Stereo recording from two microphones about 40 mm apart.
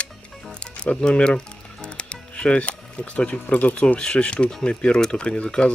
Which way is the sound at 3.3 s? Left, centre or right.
Left.